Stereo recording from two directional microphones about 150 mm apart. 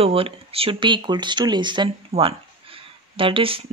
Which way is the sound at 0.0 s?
40° right (ahead or behind).